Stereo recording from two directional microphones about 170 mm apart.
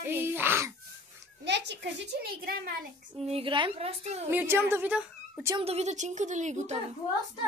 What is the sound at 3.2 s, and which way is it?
A woman's voice, 35° right (ahead or behind).